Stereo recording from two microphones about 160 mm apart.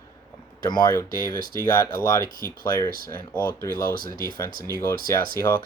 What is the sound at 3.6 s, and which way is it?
Speech, 65° right (ahead or behind).